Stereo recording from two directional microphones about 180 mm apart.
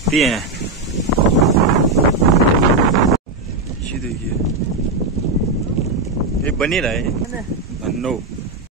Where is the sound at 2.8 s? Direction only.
Centre (ahead or behind).